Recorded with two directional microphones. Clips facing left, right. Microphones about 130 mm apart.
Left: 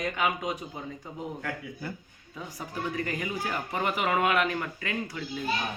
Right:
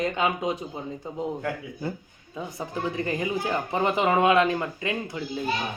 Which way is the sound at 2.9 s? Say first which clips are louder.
Right 6 dB; 25° right (ahead or behind).